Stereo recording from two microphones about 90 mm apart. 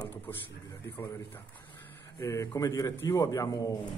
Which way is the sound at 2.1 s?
30° left (ahead or behind).